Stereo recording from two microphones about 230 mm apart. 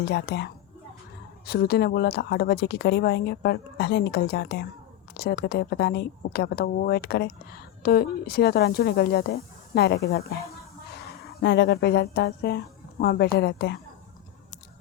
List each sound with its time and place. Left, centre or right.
0.0 s a woman's voice: left
11.3 s a woman's voice: left